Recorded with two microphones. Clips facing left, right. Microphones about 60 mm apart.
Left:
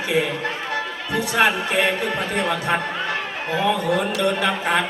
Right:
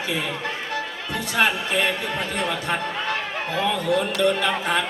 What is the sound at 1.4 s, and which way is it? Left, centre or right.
Speech, left.